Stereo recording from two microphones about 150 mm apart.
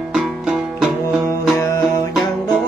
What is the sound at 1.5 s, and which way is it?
Music, 20° left (ahead or behind).